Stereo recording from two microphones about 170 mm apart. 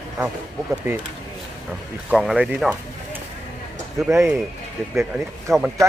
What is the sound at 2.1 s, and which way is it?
Speech, 5° right (ahead or behind).